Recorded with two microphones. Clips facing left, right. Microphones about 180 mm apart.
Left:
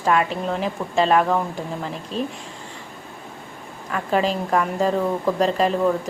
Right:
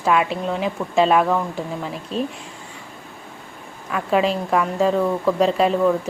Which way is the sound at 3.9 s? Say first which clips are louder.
Right 2 dB; 5° right (ahead or behind).